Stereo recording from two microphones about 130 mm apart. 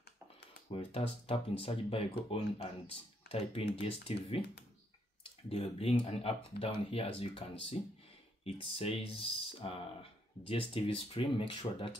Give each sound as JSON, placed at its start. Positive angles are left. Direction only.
{"t": 0.7, "sound": "speech", "side_deg": 45}
{"t": 5.5, "sound": "speech", "side_deg": 50}